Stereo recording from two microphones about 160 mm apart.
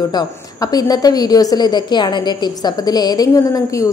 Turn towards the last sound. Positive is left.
turn(degrees=20)  # may be behind; listen again after turning